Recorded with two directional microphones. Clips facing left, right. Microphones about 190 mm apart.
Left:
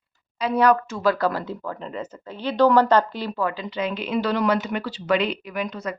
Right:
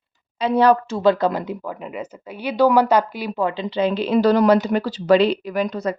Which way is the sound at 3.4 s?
25° right (ahead or behind).